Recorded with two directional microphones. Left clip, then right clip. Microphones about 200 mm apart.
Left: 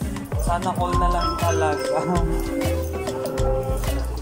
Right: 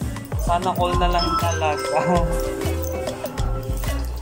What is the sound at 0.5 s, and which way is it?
Music, 5° right (ahead or behind).